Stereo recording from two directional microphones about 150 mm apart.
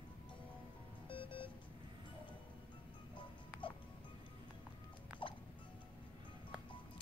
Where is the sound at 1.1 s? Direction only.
35° left (ahead or behind).